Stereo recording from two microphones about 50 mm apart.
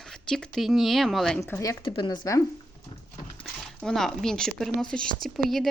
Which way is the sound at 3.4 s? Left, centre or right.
Centre.